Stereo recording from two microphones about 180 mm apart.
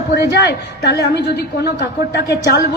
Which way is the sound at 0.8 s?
65° left (ahead or behind).